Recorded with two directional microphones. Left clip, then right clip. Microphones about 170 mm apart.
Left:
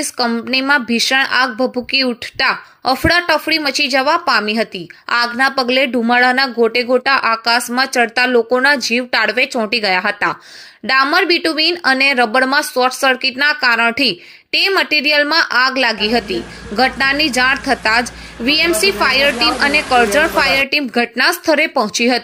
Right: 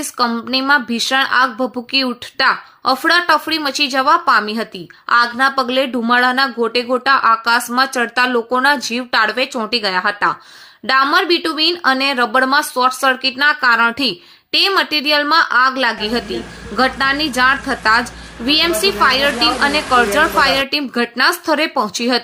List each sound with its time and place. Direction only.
0.0 s speech: 10° left (ahead or behind)
19.3 s speech: centre (ahead or behind)
20.6 s speech: 15° left (ahead or behind)